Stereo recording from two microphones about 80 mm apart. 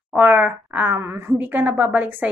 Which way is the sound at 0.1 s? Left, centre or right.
Centre.